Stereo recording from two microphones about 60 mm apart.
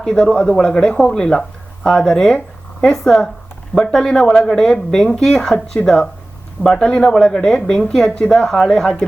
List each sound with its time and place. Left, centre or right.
0.0 s speech: centre